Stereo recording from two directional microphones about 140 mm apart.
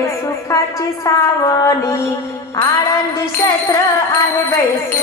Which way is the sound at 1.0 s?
25° left (ahead or behind).